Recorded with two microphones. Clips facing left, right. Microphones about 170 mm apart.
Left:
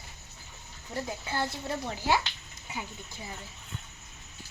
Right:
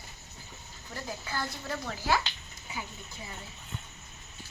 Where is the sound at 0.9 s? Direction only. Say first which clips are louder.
Left 3 dB; 25° left (ahead or behind).